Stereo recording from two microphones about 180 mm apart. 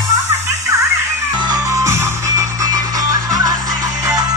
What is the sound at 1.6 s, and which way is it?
Music, 15° right (ahead or behind).